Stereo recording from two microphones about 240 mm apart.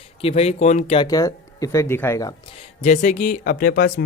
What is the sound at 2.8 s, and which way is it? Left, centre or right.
Speech, left.